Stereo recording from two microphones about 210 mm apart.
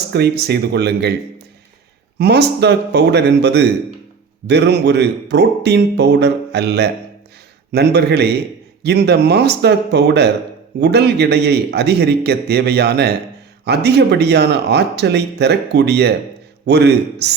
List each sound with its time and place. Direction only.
0.1 s speech: 50° right (ahead or behind)
2.1 s speech: 50° right (ahead or behind)